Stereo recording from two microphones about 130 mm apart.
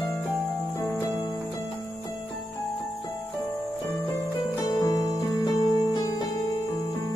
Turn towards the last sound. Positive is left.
turn(degrees=30)  # may be behind; listen again after turning